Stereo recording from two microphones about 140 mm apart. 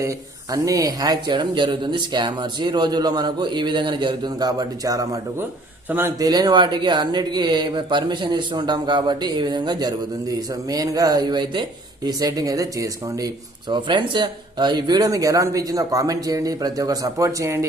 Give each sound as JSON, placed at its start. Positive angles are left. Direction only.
{"t": 0.5, "sound": "speech", "side_deg": -25}